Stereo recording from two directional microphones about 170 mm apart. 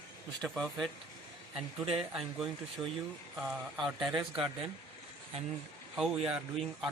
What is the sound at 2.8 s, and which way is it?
Speech, 20° right (ahead or behind).